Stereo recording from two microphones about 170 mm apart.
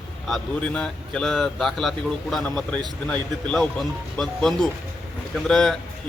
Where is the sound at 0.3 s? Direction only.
5° left (ahead or behind).